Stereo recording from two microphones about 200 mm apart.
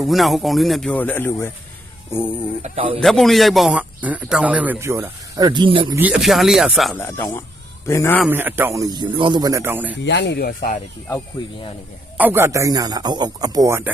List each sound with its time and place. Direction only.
0.0 s speech: centre (ahead or behind)
2.6 s speech: 30° right (ahead or behind)
3.0 s a man's voice: centre (ahead or behind)
5.5 s speech: 25° right (ahead or behind)
6.0 s speech: 5° right (ahead or behind)
7.0 s speech: 10° left (ahead or behind)
8.2 s a man's voice: 10° right (ahead or behind)
10.0 s speech: 60° left (ahead or behind); by 10.8 s 45° left (ahead or behind)
12.1 s a man's voice: 10° right (ahead or behind)